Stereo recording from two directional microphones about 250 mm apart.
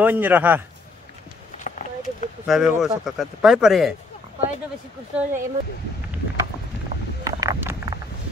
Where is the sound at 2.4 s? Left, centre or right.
Centre.